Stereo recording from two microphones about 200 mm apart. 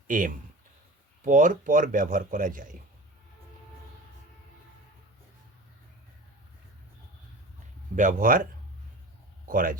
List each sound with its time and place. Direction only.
0.1 s a man's voice: 45° right (ahead or behind)
7.9 s a man's voice: 40° right (ahead or behind)
9.5 s speech: 45° right (ahead or behind)